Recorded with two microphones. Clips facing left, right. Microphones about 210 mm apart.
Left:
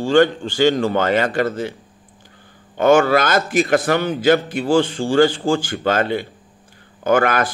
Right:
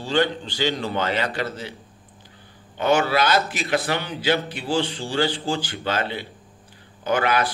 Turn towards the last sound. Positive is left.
turn(degrees=50)  # may be behind; listen again after turning